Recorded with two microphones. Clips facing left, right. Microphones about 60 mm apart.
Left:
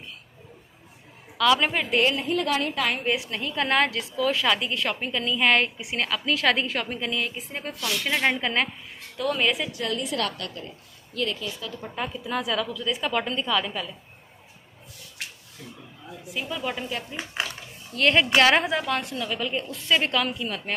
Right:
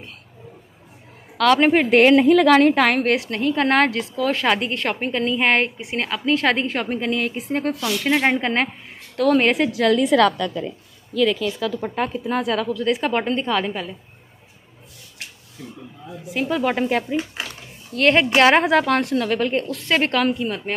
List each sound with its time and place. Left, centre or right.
1.4 s a woman's voice: right
1.9 s a woman's voice: right
8.0 s a woman's voice: right
9.1 s speech: right
11.3 s a woman's voice: right
11.8 s a woman's voice: right
12.7 s speech: right
13.1 s a woman's voice: right
16.3 s speech: right
17.9 s a woman's voice: right
18.6 s a woman's voice: right